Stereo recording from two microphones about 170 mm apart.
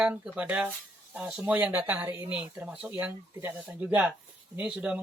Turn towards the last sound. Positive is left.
turn(degrees=-5)  # may be behind; listen again after turning